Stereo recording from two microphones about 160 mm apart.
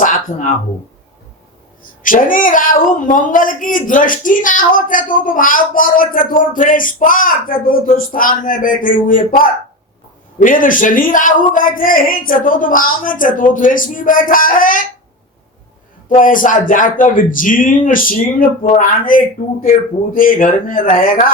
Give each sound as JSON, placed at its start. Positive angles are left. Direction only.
{"t": 0.0, "sound": "a sound", "side_deg": 55}
{"t": 2.0, "sound": "speech", "side_deg": 60}
{"t": 10.4, "sound": "speech", "side_deg": 60}
{"t": 16.0, "sound": "speech", "side_deg": 55}